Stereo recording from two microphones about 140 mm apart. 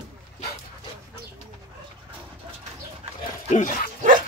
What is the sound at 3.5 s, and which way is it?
Speech, 65° left (ahead or behind).